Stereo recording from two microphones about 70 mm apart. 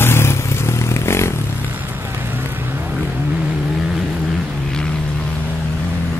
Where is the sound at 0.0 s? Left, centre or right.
Left.